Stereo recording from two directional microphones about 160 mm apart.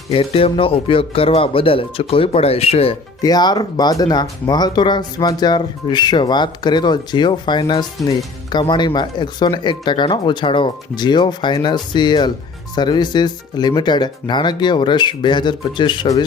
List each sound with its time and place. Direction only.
0.1 s speech: 35° left (ahead or behind)
3.2 s speech: 25° left (ahead or behind)